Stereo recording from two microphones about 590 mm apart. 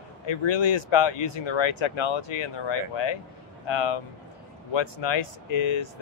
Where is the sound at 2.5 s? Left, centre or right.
Left.